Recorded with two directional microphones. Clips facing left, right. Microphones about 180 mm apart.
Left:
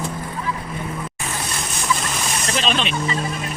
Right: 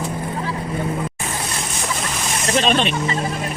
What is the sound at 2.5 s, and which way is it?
Snake, 50° right (ahead or behind).